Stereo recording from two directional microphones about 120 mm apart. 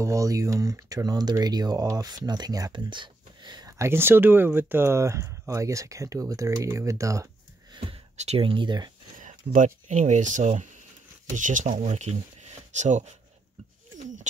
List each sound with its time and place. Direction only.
0.0 s speech: 25° right (ahead or behind)
3.7 s speech: 20° right (ahead or behind)
7.7 s a sound: 45° right (ahead or behind)
8.4 s speech: 45° right (ahead or behind)
9.8 s speech: 75° right (ahead or behind)
13.9 s a sound: 90° right